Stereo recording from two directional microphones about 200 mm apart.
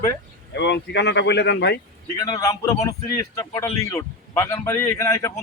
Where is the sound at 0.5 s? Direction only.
60° left (ahead or behind).